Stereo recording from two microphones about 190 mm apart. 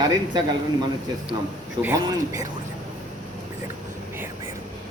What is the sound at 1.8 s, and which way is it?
Speech, 20° right (ahead or behind).